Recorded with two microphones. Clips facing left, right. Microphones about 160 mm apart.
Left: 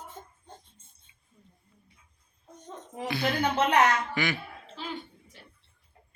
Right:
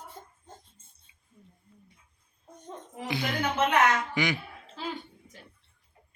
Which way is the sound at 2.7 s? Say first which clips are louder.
Left 1 dB; 15° right (ahead or behind).